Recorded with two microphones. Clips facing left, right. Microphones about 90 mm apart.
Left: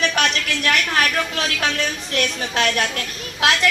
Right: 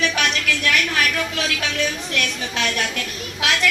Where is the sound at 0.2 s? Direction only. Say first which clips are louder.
Left 1 dB; 40° left (ahead or behind).